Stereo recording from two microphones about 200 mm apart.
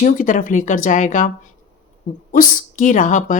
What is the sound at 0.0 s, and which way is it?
Speech, 40° left (ahead or behind).